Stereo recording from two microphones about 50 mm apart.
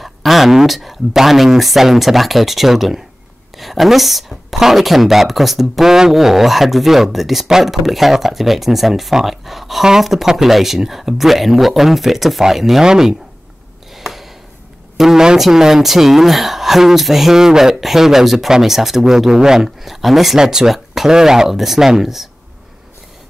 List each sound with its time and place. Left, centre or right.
0.0 s speech: centre
13.9 s a sound: centre
15.0 s speech: centre